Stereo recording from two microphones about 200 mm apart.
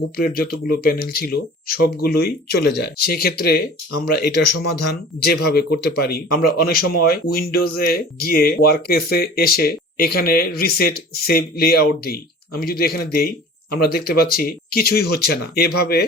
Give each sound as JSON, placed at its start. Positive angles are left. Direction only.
{"t": 0.2, "sound": "speech", "side_deg": 50}